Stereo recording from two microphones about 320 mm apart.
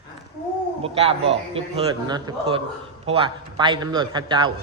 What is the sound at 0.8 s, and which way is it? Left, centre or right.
A man's voice, centre.